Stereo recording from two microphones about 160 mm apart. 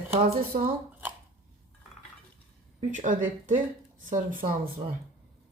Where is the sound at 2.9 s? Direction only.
50° right (ahead or behind).